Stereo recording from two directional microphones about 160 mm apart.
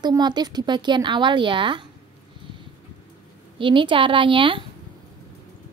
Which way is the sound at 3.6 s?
30° right (ahead or behind).